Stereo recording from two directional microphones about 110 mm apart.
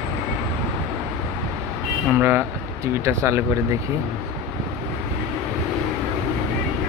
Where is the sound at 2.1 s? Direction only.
15° right (ahead or behind).